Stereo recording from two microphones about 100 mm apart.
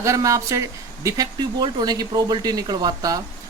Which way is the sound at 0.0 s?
30° right (ahead or behind).